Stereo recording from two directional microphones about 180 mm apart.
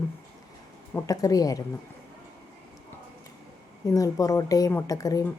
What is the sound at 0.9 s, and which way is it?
Speech, 20° left (ahead or behind).